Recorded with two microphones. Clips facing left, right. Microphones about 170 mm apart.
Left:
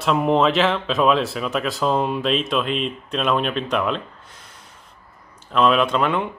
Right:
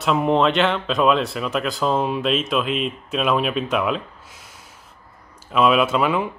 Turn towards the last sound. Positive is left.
turn(degrees=-5)  # may be behind; listen again after turning